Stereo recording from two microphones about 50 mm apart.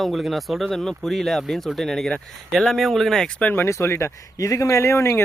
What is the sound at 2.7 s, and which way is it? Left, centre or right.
Speech, centre.